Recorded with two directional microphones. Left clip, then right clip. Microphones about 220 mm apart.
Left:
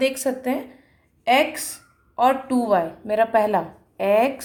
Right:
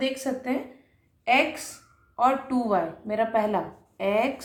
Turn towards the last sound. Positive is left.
turn(degrees=45)  # may be behind; listen again after turning